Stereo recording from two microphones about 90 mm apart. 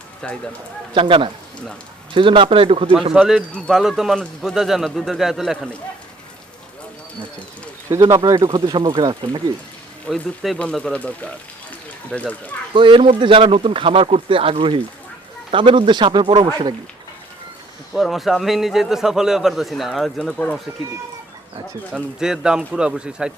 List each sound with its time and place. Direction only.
0.2 s speech: 10° left (ahead or behind)
0.9 s speech: 70° right (ahead or behind); by 2.9 s 90° right
3.1 s a man's voice: 5° right (ahead or behind)
8.1 s speech: 40° right (ahead or behind)
10.1 s a man's voice: centre (ahead or behind); by 12.5 s 15° left (ahead or behind)
12.7 s speech: 65° right (ahead or behind)
15.5 s speech: 60° right (ahead or behind)
16.4 s speech: 45° right (ahead or behind)
17.9 s a man's voice: centre (ahead or behind)
21.9 s speech: 10° right (ahead or behind)